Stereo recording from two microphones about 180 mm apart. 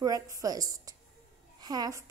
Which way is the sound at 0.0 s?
20° right (ahead or behind).